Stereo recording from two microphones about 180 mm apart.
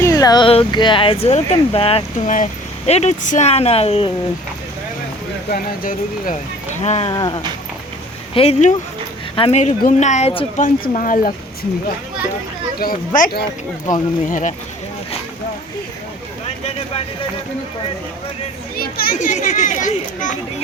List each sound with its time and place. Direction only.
0.0 s speech: 20° left (ahead or behind)
5.5 s speech: 50° left (ahead or behind)
7.1 s speech: 25° left (ahead or behind)
10.8 s a child's voice: 45° left (ahead or behind)
12.8 s a child's voice: 50° left (ahead or behind)
18.8 s a child's voice: 55° left (ahead or behind)